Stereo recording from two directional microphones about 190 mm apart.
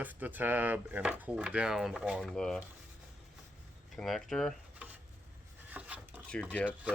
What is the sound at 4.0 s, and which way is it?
Speech, centre (ahead or behind).